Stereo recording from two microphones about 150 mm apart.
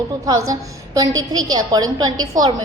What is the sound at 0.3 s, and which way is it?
A woman's voice, 20° right (ahead or behind).